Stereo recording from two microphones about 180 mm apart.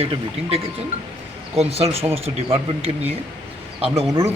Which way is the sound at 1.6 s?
35° right (ahead or behind).